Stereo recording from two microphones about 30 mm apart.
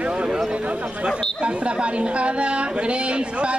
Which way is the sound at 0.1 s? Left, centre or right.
Right.